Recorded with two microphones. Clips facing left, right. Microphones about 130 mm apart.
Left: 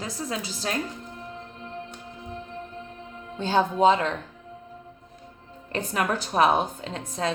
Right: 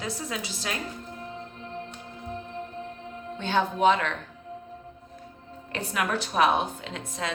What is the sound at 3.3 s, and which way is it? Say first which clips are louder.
Speech: left 3 dB; 35° left (ahead or behind).